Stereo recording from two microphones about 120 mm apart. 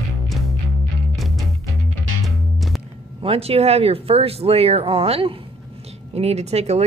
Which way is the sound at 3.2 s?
55° right (ahead or behind).